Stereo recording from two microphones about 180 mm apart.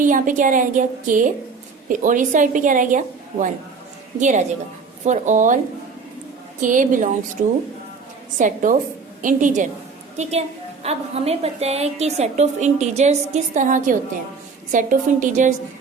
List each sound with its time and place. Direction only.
0.0 s a woman's voice: 45° right (ahead or behind)
6.6 s a woman's voice: 45° right (ahead or behind)
10.8 s a woman's voice: 35° right (ahead or behind)